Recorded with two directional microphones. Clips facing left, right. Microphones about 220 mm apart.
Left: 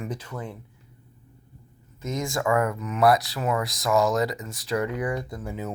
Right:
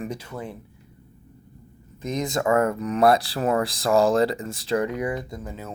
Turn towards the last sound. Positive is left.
turn(degrees=15)  # may be behind; listen again after turning